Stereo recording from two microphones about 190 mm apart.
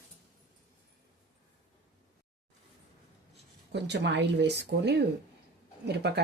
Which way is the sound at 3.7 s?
65° right (ahead or behind).